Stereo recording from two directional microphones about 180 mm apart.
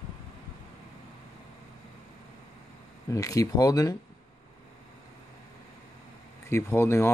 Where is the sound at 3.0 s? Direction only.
20° left (ahead or behind).